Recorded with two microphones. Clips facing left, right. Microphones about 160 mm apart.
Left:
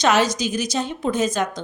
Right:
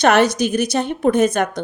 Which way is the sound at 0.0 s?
60° right (ahead or behind).